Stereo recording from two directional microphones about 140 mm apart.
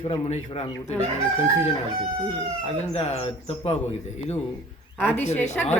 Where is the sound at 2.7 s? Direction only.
50° left (ahead or behind).